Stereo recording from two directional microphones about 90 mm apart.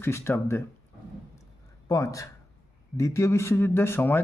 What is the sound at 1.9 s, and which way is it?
Speech, 40° left (ahead or behind).